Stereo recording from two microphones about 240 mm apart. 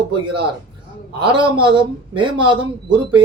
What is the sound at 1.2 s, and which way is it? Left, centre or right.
Speech, centre.